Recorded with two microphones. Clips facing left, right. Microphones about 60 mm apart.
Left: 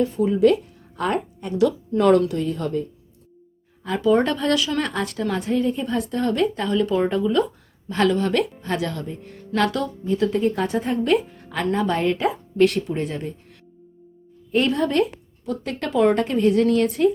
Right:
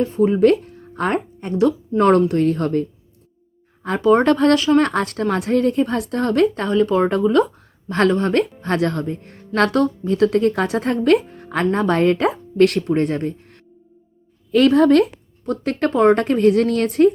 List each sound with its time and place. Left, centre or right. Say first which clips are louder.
0.0 s speech: right 3 dB; right
3.8 s a woman's voice: right 4 dB; right
14.5 s speech: right 7 dB; right
15.4 s a woman's voice: right 7 dB; right